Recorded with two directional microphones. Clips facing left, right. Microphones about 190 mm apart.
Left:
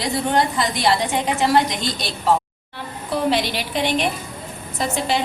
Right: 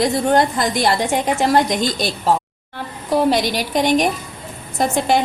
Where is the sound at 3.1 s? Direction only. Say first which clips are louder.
Right 4 dB; 40° right (ahead or behind).